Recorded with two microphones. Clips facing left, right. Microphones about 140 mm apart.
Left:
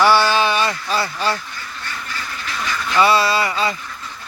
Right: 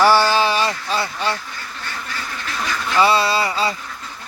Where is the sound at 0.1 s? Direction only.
35° right (ahead or behind).